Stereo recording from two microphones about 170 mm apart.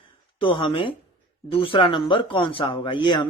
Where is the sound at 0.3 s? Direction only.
30° left (ahead or behind).